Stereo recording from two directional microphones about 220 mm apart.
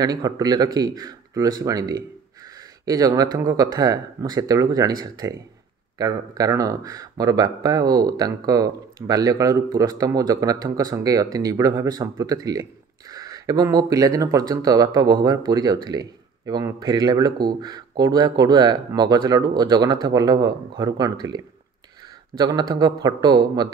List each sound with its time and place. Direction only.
0.0 s speech: 15° right (ahead or behind)
22.4 s speech: 20° right (ahead or behind)